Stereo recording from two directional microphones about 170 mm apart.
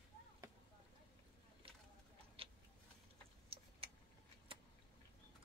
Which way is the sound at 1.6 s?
35° right (ahead or behind).